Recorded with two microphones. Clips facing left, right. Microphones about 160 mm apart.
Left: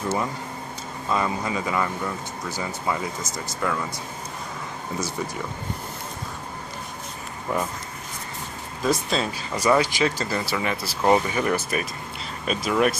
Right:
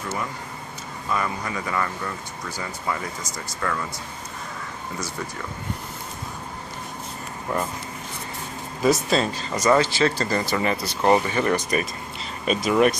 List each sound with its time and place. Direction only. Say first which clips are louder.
1.1 s speech: left 2 dB; 20° left (ahead or behind)
8.8 s speech: right 4 dB; centre (ahead or behind)
9.3 s speech: left 2 dB; 10° left (ahead or behind)